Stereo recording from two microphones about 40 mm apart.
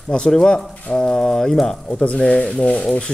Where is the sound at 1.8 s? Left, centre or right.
Left.